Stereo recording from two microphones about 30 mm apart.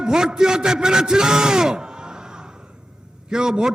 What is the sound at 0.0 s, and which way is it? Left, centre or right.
A man's voice, right.